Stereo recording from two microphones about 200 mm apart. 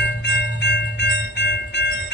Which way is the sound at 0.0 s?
60° left (ahead or behind).